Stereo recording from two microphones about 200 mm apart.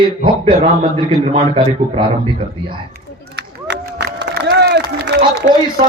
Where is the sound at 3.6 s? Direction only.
55° right (ahead or behind).